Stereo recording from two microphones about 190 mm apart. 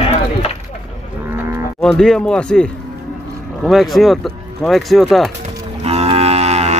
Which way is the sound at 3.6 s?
Centre (ahead or behind).